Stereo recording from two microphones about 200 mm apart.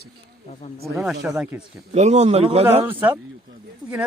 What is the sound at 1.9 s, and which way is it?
Speech, 35° right (ahead or behind).